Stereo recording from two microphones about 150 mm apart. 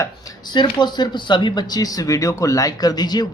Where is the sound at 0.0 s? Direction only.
30° left (ahead or behind).